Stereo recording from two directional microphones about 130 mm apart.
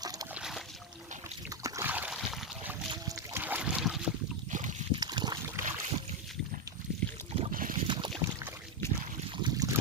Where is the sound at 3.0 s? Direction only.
20° right (ahead or behind); by 4.1 s centre (ahead or behind).